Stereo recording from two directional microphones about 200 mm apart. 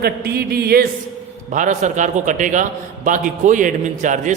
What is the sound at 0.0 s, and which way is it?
Speech, 50° right (ahead or behind).